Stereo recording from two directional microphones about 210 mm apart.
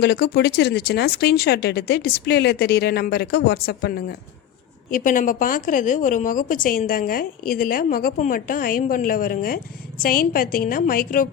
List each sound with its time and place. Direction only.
0.0 s a woman's voice: 50° left (ahead or behind)